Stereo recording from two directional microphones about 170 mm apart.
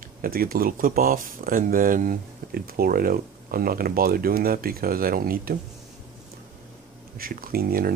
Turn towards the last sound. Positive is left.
turn(degrees=-60)  # may be behind; listen again after turning